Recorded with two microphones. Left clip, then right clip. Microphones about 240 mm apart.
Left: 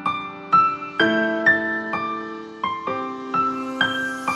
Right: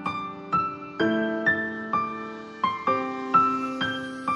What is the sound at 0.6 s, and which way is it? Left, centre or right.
Music, left.